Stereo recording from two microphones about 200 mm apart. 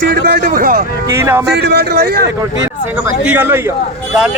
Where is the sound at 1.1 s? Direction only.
15° right (ahead or behind).